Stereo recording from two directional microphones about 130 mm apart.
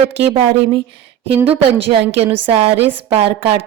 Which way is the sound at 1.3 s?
45° right (ahead or behind).